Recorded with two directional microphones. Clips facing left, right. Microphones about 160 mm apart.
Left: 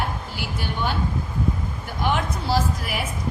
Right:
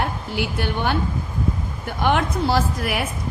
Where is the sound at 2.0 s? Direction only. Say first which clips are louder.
Right 4 dB; 60° right (ahead or behind).